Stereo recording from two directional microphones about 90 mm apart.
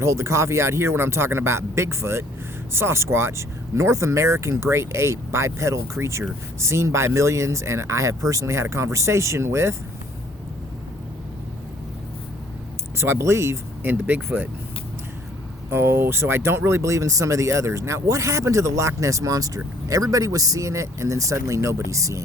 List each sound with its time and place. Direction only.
0.0 s speech: 30° right (ahead or behind)
13.0 s speech: 30° right (ahead or behind)
15.7 s speech: 25° right (ahead or behind)